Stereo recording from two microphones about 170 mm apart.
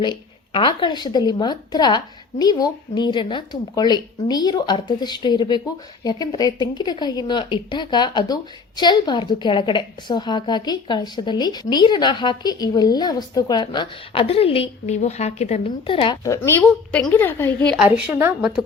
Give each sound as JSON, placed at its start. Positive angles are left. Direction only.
{"t": 0.0, "sound": "a woman's voice", "side_deg": 25}
{"t": 16.2, "sound": "speech", "side_deg": 15}
{"t": 17.7, "sound": "a woman's voice", "side_deg": -5}